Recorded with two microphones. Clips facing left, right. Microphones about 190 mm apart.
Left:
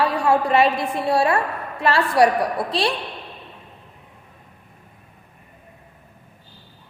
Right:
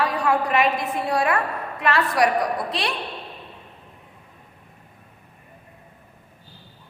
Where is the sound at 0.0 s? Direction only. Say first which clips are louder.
Left 3 dB; 30° left (ahead or behind).